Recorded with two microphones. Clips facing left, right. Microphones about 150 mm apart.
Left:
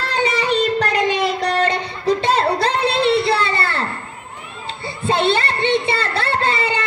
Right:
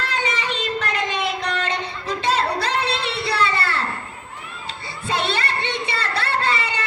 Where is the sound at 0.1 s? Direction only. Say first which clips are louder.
Left 11 dB; 35° left (ahead or behind).